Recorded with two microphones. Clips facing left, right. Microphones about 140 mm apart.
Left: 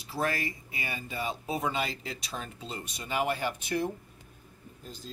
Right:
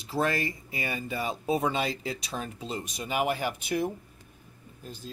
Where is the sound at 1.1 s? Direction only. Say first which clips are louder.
Right 4 dB; 30° right (ahead or behind); by 3.9 s 10° right (ahead or behind).